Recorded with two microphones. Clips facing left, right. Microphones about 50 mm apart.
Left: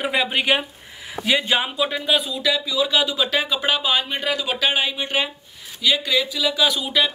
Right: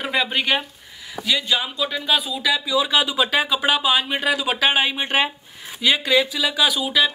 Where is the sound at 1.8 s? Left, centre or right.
Centre.